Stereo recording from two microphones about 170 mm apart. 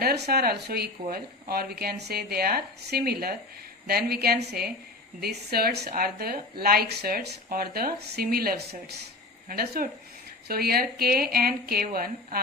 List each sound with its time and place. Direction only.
0.0 s speech: 65° right (ahead or behind)